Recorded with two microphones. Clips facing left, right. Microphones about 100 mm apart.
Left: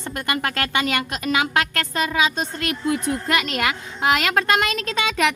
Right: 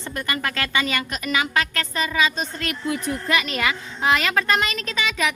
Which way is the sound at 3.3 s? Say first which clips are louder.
Right 1 dB; 60° left (ahead or behind).